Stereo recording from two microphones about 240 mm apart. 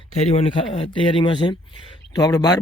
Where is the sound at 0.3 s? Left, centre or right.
Left.